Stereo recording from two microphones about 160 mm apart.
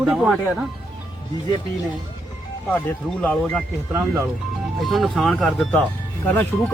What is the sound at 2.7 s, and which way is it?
Speech, 10° left (ahead or behind).